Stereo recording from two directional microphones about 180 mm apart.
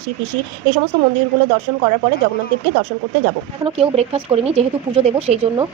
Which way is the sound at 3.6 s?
35° right (ahead or behind).